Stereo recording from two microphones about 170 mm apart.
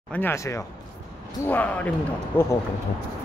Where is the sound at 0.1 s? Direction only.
15° left (ahead or behind).